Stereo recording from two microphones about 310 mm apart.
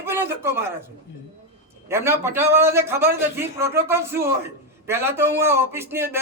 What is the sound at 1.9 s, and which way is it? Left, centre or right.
A man's voice, centre.